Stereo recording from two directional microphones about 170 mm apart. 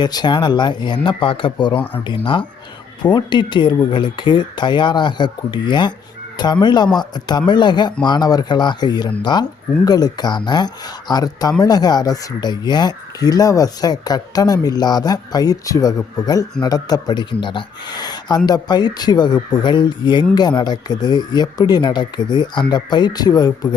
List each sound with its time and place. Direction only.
0.0 s speech: 25° left (ahead or behind)